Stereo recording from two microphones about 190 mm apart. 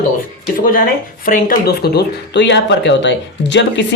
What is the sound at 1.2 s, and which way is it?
Speech, 45° left (ahead or behind).